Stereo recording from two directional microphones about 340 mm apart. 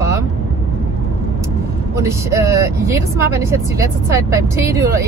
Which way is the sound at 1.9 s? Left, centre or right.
Centre.